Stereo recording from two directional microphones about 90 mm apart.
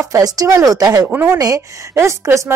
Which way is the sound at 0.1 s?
40° right (ahead or behind).